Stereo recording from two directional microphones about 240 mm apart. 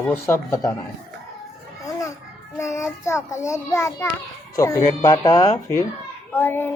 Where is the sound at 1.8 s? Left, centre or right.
Centre.